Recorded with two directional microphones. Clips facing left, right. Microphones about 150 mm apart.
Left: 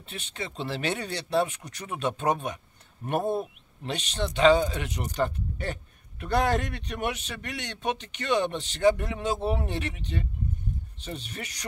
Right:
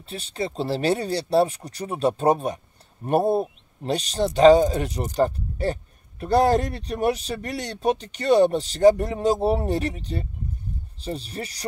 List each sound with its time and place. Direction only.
0.0 s speech: 35° right (ahead or behind)